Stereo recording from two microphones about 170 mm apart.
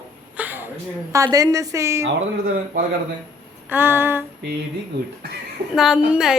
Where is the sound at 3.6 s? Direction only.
10° right (ahead or behind).